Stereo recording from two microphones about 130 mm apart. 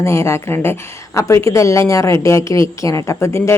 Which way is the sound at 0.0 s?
20° left (ahead or behind).